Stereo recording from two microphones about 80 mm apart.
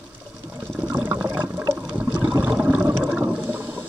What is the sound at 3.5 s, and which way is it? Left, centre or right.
Ratchet, centre.